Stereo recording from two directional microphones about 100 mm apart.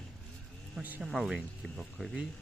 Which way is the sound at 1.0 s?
5° right (ahead or behind).